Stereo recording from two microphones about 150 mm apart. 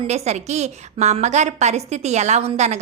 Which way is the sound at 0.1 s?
50° right (ahead or behind).